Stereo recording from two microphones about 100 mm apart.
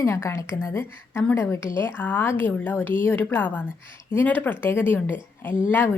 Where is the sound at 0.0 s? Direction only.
25° left (ahead or behind).